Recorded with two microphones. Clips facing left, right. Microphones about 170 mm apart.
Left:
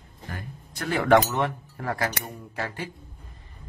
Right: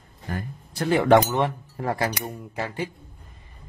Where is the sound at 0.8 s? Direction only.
25° right (ahead or behind).